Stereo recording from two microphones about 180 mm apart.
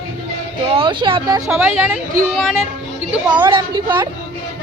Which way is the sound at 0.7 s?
30° right (ahead or behind).